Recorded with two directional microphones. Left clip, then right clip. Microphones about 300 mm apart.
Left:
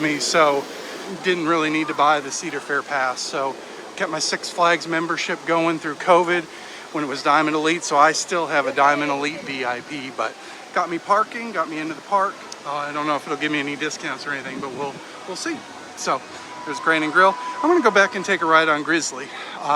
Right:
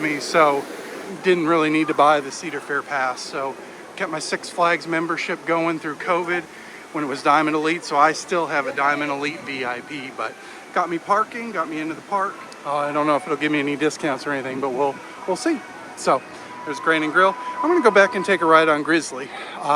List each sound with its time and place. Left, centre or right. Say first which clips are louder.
0.0 s speech: even; centre